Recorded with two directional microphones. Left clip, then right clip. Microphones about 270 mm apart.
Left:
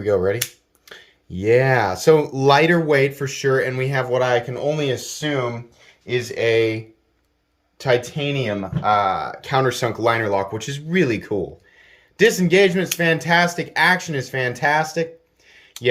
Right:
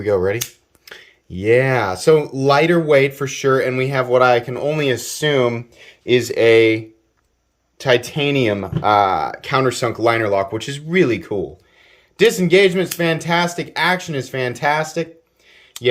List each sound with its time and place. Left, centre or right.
0.0 s speech: centre
5.2 s speech: right; by 8.1 s centre
8.1 s speech: centre
15.4 s a sound: centre